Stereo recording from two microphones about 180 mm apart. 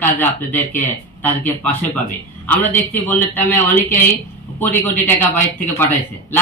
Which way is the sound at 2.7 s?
10° left (ahead or behind).